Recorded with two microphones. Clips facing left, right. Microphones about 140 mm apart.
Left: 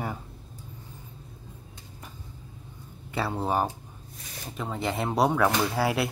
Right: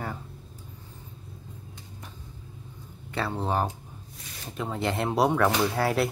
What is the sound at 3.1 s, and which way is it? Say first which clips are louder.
Speech: left 1 dB; 5° left (ahead or behind).